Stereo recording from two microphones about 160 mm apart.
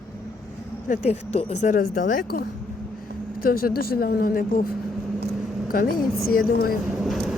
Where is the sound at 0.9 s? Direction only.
50° left (ahead or behind); by 4.6 s 65° left (ahead or behind).